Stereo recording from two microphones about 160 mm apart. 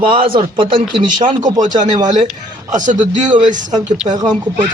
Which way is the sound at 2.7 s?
50° right (ahead or behind).